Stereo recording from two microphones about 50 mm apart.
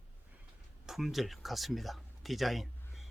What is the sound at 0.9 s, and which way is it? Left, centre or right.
Speech, centre.